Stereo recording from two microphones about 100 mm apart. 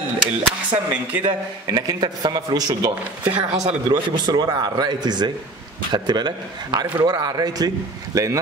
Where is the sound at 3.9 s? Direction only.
45° right (ahead or behind).